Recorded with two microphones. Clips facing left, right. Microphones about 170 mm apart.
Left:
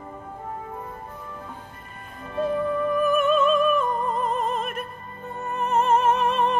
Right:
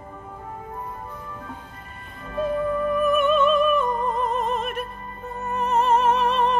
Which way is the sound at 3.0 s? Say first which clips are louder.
Right 1 dB; centre (ahead or behind).